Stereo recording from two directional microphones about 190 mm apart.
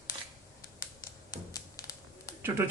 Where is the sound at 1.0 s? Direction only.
20° left (ahead or behind).